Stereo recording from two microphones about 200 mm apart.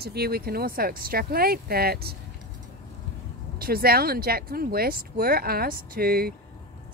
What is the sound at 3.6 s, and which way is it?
Speech, 50° right (ahead or behind).